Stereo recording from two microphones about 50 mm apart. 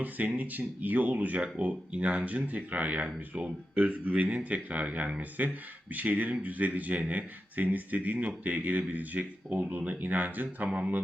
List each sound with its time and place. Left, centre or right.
0.0 s speech: right
10.7 s speech: centre